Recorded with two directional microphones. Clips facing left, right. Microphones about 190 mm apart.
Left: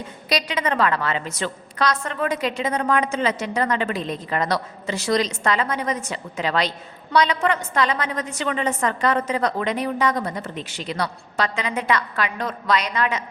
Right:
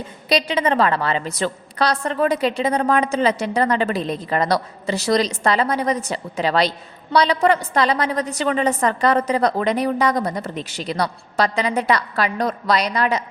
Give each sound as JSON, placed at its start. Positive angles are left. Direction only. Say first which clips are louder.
{"t": 0.3, "sound": "a woman's voice", "louder": "right 5 dB", "side_deg": -30}